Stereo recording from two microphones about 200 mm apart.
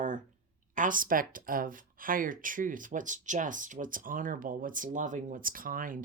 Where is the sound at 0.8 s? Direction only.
45° right (ahead or behind).